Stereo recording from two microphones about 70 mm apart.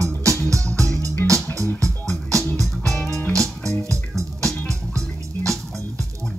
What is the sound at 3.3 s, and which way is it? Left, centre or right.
Music, right.